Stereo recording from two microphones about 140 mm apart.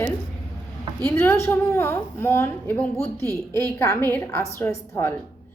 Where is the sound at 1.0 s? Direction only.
15° left (ahead or behind).